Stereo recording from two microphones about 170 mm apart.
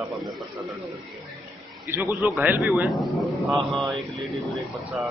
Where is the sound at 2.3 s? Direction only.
5° right (ahead or behind).